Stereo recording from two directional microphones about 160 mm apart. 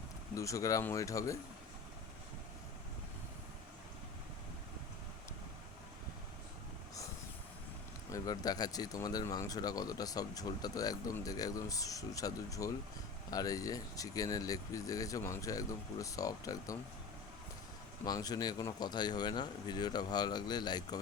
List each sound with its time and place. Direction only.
0.3 s speech: 20° left (ahead or behind)
8.1 s speech: 25° left (ahead or behind)
18.0 s speech: 25° left (ahead or behind)